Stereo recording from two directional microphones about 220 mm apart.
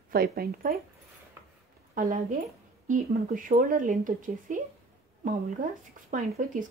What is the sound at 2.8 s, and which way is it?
Speech, 35° right (ahead or behind).